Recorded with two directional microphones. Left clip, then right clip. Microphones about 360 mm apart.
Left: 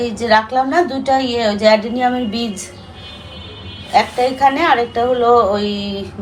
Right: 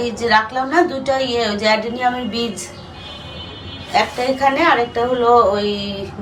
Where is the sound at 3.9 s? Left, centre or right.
Centre.